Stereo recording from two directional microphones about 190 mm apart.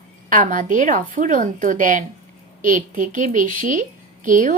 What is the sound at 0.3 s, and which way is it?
Speech, 45° right (ahead or behind).